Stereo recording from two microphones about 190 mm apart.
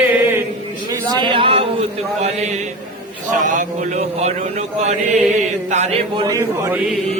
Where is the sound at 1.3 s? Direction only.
30° right (ahead or behind).